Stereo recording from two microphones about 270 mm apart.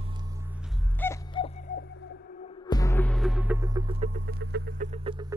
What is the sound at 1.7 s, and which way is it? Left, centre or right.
Music, left.